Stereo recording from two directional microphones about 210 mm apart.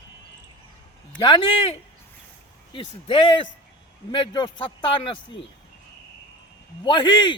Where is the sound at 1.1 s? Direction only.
20° left (ahead or behind).